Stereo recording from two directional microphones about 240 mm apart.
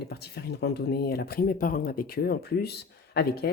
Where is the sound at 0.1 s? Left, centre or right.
Left.